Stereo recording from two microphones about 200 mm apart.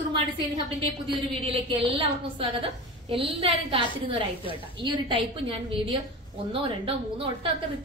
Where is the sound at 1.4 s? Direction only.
30° right (ahead or behind).